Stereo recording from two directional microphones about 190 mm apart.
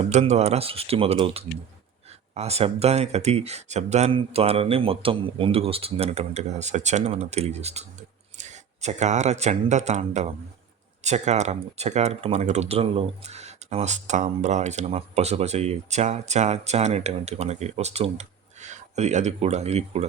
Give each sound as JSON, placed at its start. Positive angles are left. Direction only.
{"t": 0.0, "sound": "speech", "side_deg": -35}